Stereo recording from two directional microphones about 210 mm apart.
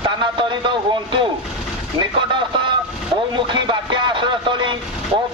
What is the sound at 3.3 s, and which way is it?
Speech, 20° right (ahead or behind).